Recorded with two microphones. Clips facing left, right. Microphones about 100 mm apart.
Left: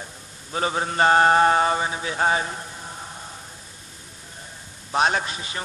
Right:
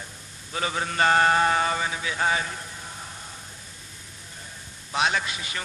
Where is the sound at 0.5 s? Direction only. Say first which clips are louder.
Left 4 dB; 30° left (ahead or behind).